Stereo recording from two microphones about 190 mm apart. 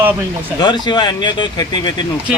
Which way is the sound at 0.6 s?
20° left (ahead or behind).